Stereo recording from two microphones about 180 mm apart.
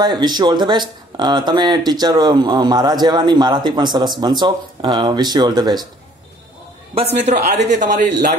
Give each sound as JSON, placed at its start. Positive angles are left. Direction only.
{"t": 0.0, "sound": "speech", "side_deg": -25}
{"t": 7.0, "sound": "speech", "side_deg": -35}